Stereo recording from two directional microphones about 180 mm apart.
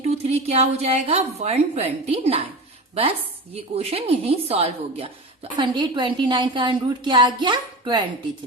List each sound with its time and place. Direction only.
0.0 s a woman's voice: 35° right (ahead or behind)